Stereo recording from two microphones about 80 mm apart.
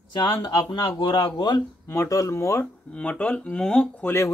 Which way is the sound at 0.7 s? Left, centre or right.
Left.